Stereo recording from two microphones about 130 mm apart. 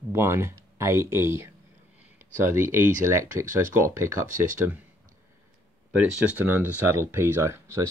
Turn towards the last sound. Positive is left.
turn(degrees=-20)  # may be behind; listen again after turning